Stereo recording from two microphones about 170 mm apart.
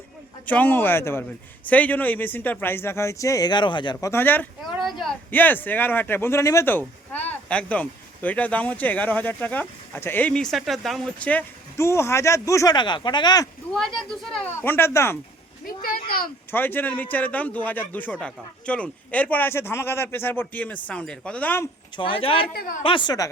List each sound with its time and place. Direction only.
0.4 s speech: 10° left (ahead or behind); by 4.1 s 25° left (ahead or behind)
4.1 s speech: 10° left (ahead or behind)
4.6 s speech: centre (ahead or behind)
5.3 s speech: 10° left (ahead or behind)
13.7 s speech: 5° left (ahead or behind)
15.8 s speech: 60° left (ahead or behind)
16.5 s speech: 10° left (ahead or behind)
21.9 s a woman's voice: 30° left (ahead or behind)